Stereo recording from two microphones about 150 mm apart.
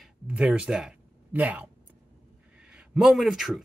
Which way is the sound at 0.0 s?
5° right (ahead or behind).